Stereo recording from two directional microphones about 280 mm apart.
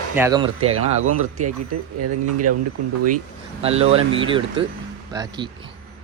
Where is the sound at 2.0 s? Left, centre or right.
Right.